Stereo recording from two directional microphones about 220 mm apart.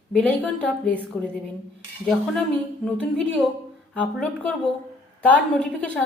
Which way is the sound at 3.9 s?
5° left (ahead or behind).